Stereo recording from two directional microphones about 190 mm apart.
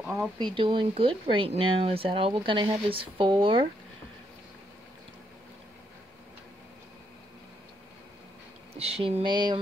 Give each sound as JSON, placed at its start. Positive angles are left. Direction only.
{"t": 0.0, "sound": "speech", "side_deg": -10}
{"t": 0.6, "sound": "speech", "side_deg": -25}
{"t": 8.7, "sound": "speech", "side_deg": -30}